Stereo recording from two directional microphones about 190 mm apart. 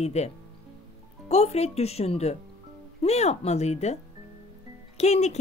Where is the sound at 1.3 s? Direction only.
35° left (ahead or behind).